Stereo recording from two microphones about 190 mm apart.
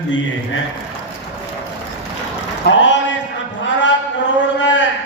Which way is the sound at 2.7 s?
75° left (ahead or behind).